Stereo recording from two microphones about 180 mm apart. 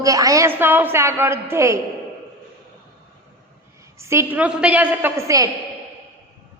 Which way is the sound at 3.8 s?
15° right (ahead or behind).